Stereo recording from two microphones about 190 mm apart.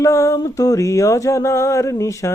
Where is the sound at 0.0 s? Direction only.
15° left (ahead or behind).